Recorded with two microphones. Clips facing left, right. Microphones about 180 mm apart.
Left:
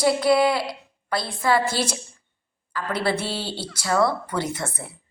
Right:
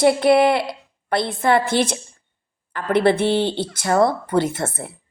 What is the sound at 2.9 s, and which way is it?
Speech, 20° right (ahead or behind).